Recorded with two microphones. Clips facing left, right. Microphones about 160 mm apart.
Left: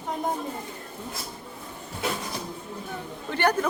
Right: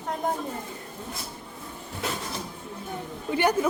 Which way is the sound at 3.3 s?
10° right (ahead or behind).